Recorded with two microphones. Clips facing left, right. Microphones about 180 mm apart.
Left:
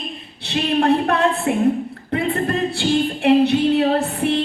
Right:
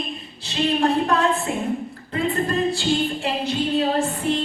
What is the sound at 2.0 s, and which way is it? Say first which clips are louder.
Singing: left 2 dB; 65° left (ahead or behind).